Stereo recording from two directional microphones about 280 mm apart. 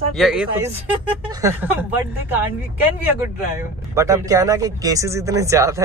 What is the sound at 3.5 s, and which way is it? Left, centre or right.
Speech, centre.